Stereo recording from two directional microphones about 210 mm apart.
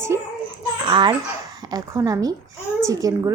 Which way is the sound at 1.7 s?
15° right (ahead or behind).